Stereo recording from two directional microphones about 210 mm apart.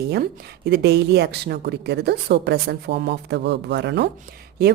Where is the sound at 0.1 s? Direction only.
50° right (ahead or behind).